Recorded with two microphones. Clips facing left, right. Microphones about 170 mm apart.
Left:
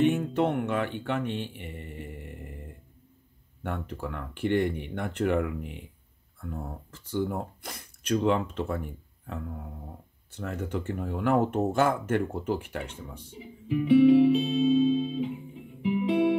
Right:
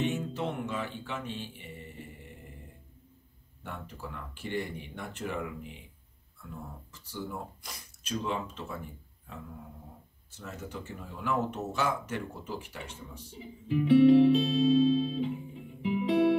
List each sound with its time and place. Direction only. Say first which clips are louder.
0.0 s music: left 8 dB; 55° left (ahead or behind)
3.6 s speech: left 8 dB; 60° left (ahead or behind)
13.4 s music: left 1 dB; 5° left (ahead or behind)